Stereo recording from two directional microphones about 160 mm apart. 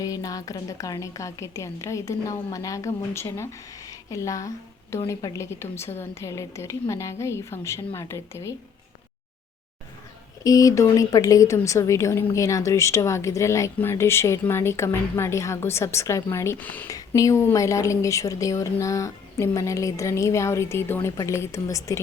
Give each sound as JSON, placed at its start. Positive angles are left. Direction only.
{"t": 0.0, "sound": "a woman's voice", "side_deg": 20}
{"t": 10.4, "sound": "a woman's voice", "side_deg": 20}